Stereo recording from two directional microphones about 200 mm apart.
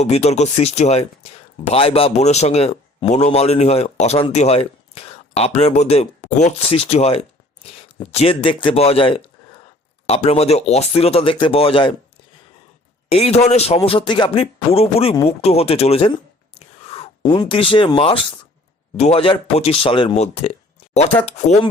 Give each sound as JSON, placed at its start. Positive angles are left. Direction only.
{"t": 0.0, "sound": "a man's voice", "side_deg": 35}
{"t": 13.1, "sound": "speech", "side_deg": 30}
{"t": 15.3, "sound": "a sound", "side_deg": 30}
{"t": 17.2, "sound": "speech", "side_deg": 20}